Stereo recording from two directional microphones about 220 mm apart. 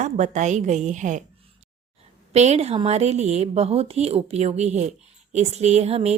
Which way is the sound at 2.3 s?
30° right (ahead or behind).